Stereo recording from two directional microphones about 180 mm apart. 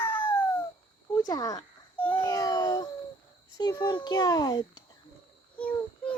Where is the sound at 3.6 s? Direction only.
20° left (ahead or behind).